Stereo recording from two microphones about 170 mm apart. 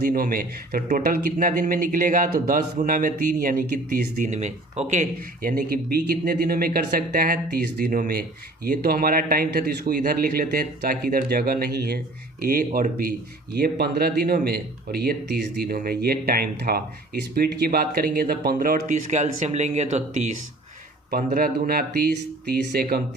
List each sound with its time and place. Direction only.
0.0 s a man's voice: 55° right (ahead or behind)
12.4 s a man's voice: 60° right (ahead or behind); by 20.3 s 45° right (ahead or behind)
21.3 s a man's voice: 60° right (ahead or behind)